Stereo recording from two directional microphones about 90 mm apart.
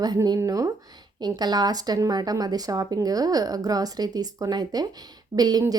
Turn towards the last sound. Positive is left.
turn(degrees=-45)  # may be behind; listen again after turning